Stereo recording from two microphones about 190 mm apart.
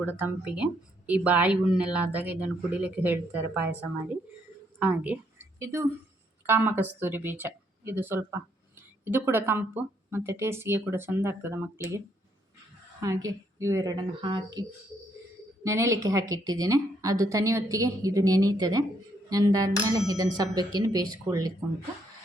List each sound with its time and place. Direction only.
0.2 s speech: 5° right (ahead or behind)
4.8 s a woman's voice: 10° right (ahead or behind); by 14.6 s 25° right (ahead or behind)
15.6 s speech: 15° right (ahead or behind)